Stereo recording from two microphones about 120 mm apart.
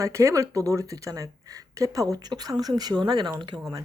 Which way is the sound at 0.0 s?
25° right (ahead or behind).